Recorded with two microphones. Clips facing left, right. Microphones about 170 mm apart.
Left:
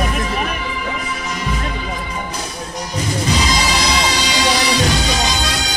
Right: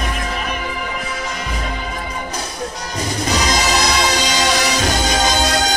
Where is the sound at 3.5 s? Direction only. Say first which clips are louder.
Right 1 dB; 45° right (ahead or behind).